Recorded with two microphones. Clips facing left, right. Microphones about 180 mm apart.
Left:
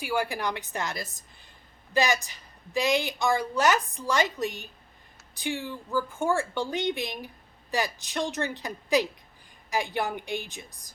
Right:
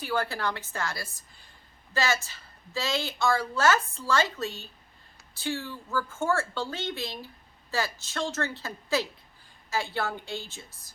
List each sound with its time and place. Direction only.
0.0 s a woman's voice: 10° left (ahead or behind)